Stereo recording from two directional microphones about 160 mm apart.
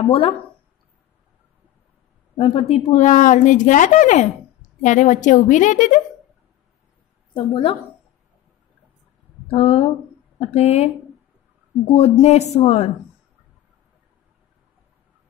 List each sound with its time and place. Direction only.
0.0 s speech: 35° left (ahead or behind)
2.3 s a woman's voice: 35° left (ahead or behind); by 5.9 s 50° left (ahead or behind)
7.3 s speech: 30° left (ahead or behind)
9.5 s speech: 35° left (ahead or behind)
11.9 s a woman's voice: 40° left (ahead or behind)